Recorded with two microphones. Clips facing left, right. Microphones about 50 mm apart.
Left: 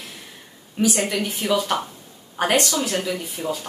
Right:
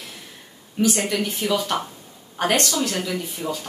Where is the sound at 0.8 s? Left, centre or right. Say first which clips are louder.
Even; centre.